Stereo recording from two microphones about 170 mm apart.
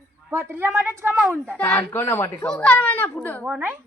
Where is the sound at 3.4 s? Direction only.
10° right (ahead or behind).